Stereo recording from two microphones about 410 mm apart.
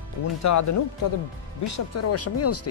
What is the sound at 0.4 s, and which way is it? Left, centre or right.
Speech, left.